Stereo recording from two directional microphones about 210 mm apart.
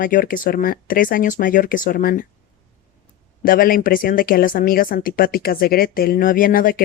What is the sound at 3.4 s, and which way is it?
Speech, 45° left (ahead or behind).